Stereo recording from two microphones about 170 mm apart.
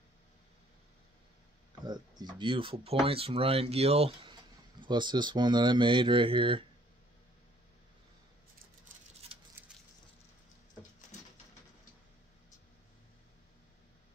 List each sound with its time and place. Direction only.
1.9 s speech: 25° right (ahead or behind)